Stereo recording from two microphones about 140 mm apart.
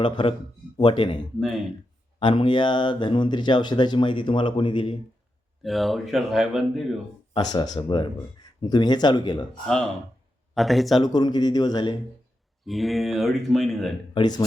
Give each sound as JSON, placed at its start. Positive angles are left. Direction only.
{"t": 0.0, "sound": "speech", "side_deg": 35}
{"t": 5.6, "sound": "speech", "side_deg": 0}
{"t": 7.3, "sound": "speech", "side_deg": 30}
{"t": 10.5, "sound": "speech", "side_deg": 0}
{"t": 11.0, "sound": "a man's voice", "side_deg": 30}
{"t": 12.6, "sound": "speech", "side_deg": 0}
{"t": 14.1, "sound": "speech", "side_deg": 30}